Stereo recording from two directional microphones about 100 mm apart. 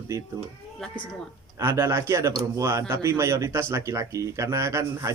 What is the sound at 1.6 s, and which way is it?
Speech, 25° right (ahead or behind).